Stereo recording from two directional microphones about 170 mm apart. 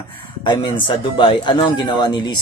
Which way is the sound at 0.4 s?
25° left (ahead or behind).